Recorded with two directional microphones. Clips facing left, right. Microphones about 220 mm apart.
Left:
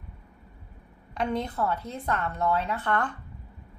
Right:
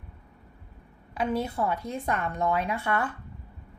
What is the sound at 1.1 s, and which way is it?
A woman's voice, 5° right (ahead or behind).